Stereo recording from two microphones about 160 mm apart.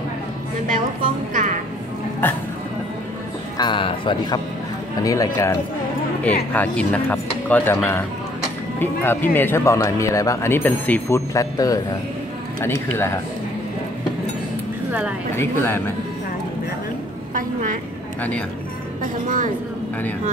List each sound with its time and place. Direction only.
1.3 s music: 55° right (ahead or behind)
2.2 s speech: 10° left (ahead or behind)
3.5 s speech: 30° left (ahead or behind)
5.0 s speech: 20° left (ahead or behind)
12.9 s speech: 15° left (ahead or behind)
14.9 s a woman's voice: 10° right (ahead or behind)
15.3 s speech: 15° left (ahead or behind)
17.3 s a woman's voice: 55° right (ahead or behind)